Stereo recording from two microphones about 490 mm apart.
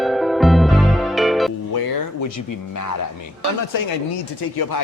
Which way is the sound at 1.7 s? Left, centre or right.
Left.